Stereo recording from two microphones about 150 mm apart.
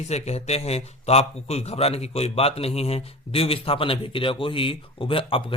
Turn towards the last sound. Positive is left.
turn(degrees=35)  # may be behind; listen again after turning